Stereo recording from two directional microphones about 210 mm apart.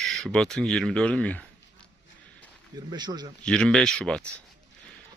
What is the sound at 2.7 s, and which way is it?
Speech, 20° right (ahead or behind).